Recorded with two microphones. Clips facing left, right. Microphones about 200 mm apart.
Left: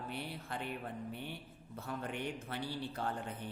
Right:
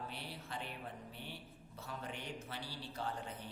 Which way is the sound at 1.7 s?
55° left (ahead or behind).